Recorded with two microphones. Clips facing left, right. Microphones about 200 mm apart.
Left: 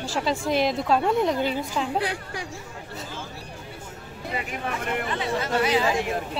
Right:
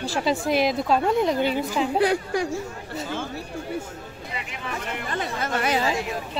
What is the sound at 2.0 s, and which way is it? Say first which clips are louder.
Speech: right 9 dB; 45° right (ahead or behind).